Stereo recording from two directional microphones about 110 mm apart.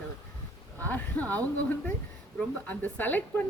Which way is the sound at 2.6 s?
15° left (ahead or behind).